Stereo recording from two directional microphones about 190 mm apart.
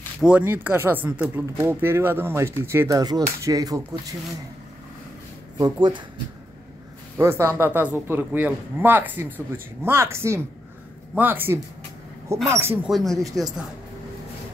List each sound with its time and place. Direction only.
0.2 s speech: 10° right (ahead or behind)
5.6 s speech: 25° right (ahead or behind)
7.2 s speech: 15° right (ahead or behind)
12.9 s speech: centre (ahead or behind)